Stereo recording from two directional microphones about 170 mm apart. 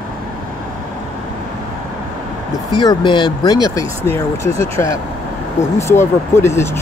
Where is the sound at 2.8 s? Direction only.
30° left (ahead or behind).